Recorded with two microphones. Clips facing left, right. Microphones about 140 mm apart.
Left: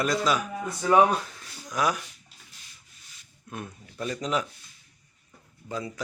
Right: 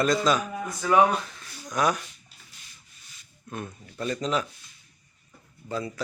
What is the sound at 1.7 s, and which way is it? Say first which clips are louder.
Speech: right 2 dB; 5° left (ahead or behind).